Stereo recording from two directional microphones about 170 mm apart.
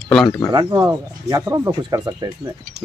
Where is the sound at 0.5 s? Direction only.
20° right (ahead or behind).